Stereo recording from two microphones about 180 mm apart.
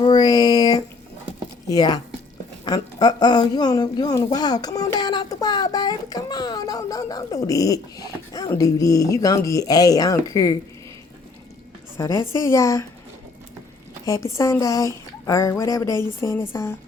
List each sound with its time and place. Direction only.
0.0 s a sound: 20° left (ahead or behind)
1.7 s a child's voice: 20° left (ahead or behind)
11.9 s speech: 15° left (ahead or behind)
14.0 s a woman's voice: 15° left (ahead or behind)